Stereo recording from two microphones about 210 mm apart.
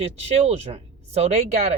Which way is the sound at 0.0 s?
30° right (ahead or behind).